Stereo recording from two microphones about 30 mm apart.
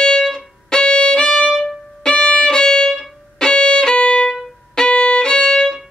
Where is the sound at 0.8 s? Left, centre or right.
Left.